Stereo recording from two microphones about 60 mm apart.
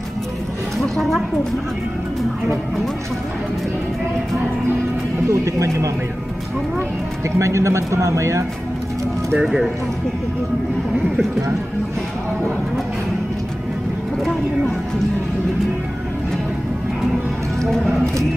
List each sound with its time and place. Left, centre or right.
5.3 s speech: right
7.3 s speech: right
9.4 s speech: centre